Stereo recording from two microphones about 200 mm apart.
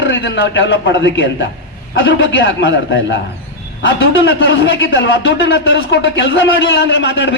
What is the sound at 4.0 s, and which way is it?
A man's voice, 55° left (ahead or behind).